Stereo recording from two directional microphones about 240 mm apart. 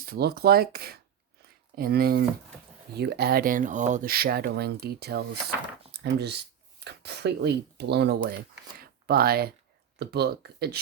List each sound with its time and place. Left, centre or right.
0.0 s speech: right
8.8 s a sound: right
10.0 s speech: right